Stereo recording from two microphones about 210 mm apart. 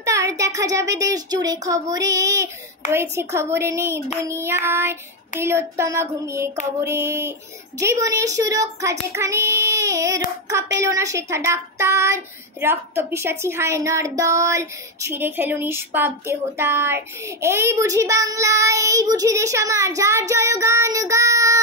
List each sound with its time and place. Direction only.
0.0 s child singing: 15° right (ahead or behind)